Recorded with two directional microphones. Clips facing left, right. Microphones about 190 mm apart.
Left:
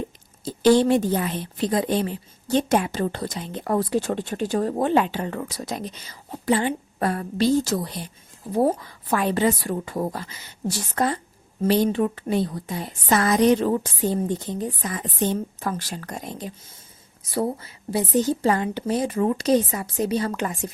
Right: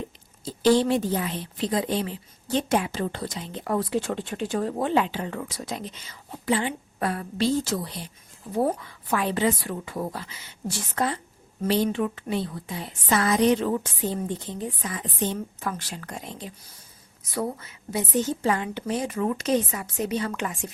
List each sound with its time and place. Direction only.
0.4 s a woman's voice: 50° left (ahead or behind)
17.3 s a woman's voice: 30° left (ahead or behind)